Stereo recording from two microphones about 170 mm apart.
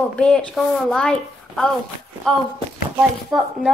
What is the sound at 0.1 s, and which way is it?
A woman's voice, 5° left (ahead or behind).